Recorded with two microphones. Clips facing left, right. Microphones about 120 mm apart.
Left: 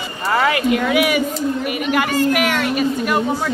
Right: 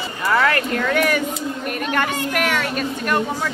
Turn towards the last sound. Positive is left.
turn(degrees=5)  # may be behind; listen again after turning